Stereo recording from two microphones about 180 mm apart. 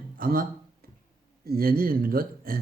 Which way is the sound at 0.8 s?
55° right (ahead or behind).